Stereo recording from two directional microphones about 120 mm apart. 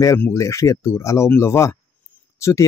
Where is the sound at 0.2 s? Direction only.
25° left (ahead or behind).